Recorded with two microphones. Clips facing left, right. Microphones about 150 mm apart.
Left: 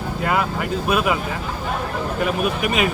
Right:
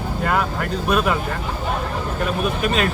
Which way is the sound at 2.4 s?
10° left (ahead or behind).